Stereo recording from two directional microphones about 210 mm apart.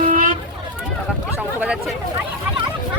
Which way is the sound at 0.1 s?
40° right (ahead or behind).